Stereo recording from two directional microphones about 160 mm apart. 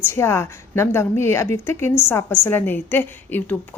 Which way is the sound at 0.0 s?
15° left (ahead or behind).